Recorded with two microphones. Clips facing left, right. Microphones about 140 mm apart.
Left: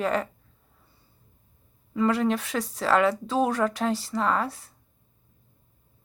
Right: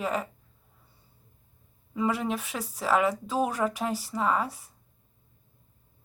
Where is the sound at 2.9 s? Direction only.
80° left.